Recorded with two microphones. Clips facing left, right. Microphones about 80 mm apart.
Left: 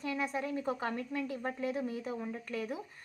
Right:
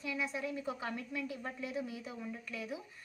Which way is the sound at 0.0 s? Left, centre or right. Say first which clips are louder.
Left 3 dB; left.